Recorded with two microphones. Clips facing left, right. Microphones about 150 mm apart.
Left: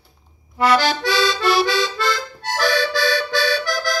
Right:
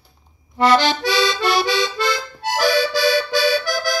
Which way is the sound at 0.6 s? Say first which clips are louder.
Right 1 dB; 5° left (ahead or behind).